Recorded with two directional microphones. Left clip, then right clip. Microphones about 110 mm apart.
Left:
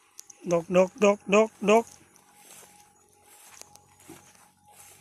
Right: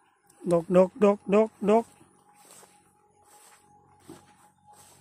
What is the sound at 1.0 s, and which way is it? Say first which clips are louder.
Speech: left 1 dB; 45° right (ahead or behind).